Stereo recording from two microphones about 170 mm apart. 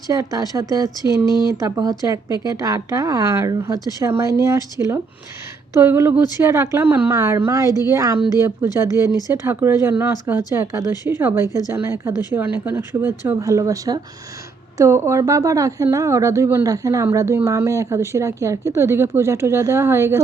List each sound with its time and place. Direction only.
0.1 s a woman's voice: 20° right (ahead or behind)
10.9 s speech: 25° left (ahead or behind)
11.2 s a woman's voice: 10° right (ahead or behind)